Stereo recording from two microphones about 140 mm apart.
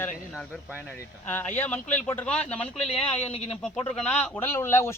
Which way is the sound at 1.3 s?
15° left (ahead or behind).